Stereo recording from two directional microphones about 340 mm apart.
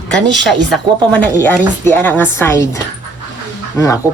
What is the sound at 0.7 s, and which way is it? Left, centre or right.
A woman's voice, centre.